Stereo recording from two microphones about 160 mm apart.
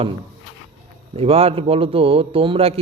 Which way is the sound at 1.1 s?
40° right (ahead or behind).